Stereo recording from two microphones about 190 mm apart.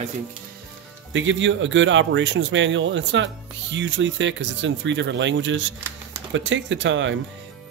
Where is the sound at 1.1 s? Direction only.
75° right (ahead or behind).